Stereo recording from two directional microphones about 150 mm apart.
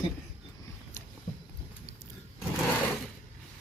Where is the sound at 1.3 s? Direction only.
55° left (ahead or behind).